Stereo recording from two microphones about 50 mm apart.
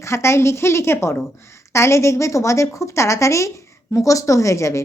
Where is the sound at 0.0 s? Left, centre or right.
Left.